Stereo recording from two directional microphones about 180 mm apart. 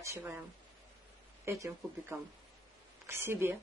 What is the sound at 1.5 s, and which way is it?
Speech, 15° right (ahead or behind).